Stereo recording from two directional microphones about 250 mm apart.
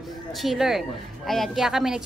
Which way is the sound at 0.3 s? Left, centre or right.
Centre.